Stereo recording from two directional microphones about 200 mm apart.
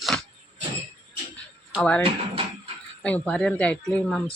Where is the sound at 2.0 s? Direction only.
25° right (ahead or behind).